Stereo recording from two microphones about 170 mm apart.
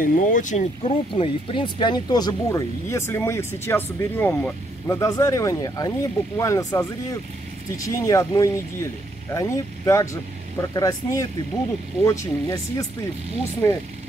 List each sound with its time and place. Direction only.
0.0 s speech: 55° left (ahead or behind)
0.8 s speech: 30° left (ahead or behind); by 13.8 s 15° left (ahead or behind)